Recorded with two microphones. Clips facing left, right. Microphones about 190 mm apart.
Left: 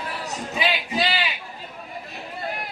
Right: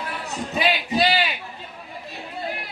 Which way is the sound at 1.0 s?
40° right (ahead or behind).